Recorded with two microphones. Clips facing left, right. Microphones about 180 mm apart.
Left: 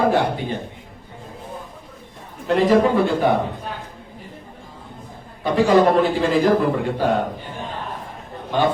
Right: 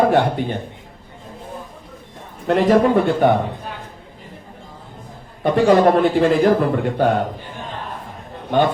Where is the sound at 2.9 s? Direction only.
60° right (ahead or behind).